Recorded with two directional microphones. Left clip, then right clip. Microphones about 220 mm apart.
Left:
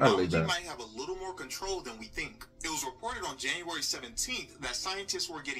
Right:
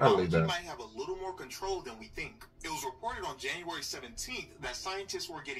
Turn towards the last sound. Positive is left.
turn(degrees=25)  # may be behind; listen again after turning